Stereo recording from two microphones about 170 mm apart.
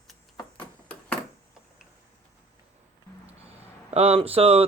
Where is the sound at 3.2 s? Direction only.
35° right (ahead or behind).